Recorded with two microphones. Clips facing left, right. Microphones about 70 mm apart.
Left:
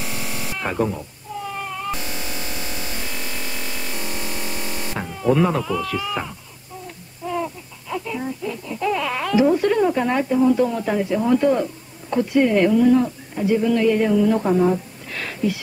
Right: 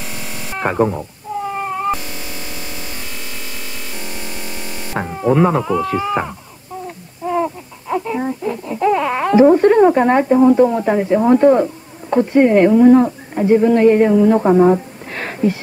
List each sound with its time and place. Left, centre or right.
0.6 s cat: right
4.9 s speech: right
7.2 s baby cry: right